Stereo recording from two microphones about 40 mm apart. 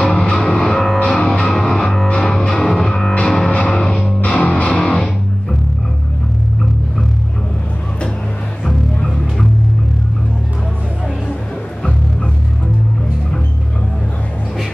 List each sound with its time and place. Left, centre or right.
0.0 s music: left
0.3 s music: centre
1.1 s music: centre
4.2 s music: left